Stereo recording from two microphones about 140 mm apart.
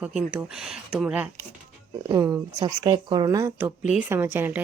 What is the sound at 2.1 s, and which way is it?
Speech, 25° right (ahead or behind).